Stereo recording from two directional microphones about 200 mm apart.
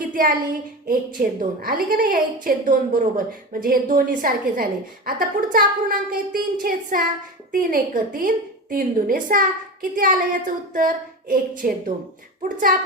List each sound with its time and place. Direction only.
0.0 s a child's voice: 45° right (ahead or behind)